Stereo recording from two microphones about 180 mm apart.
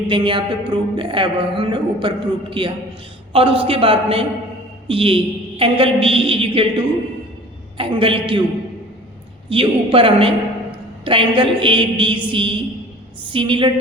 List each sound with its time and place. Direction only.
0.1 s a woman's voice: 25° right (ahead or behind)
9.5 s a woman's voice: 30° right (ahead or behind)